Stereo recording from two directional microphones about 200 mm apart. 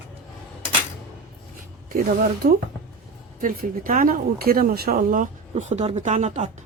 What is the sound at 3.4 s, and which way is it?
Speech, 45° right (ahead or behind).